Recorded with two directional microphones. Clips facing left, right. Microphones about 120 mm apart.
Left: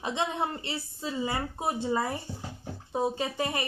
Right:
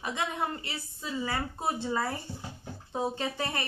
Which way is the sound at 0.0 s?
25° left (ahead or behind).